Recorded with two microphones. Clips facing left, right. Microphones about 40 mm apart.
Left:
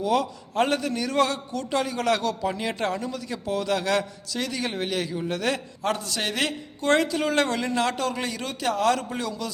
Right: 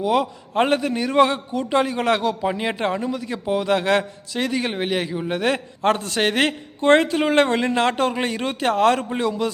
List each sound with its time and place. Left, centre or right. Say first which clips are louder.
0.0 s a man's voice: right 4 dB; right
5.4 s a man's voice: right 5 dB; right